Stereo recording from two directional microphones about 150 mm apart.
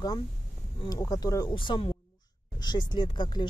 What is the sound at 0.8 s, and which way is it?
Speech, 25° left (ahead or behind).